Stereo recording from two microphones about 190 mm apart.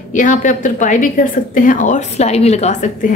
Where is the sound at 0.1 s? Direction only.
45° left (ahead or behind).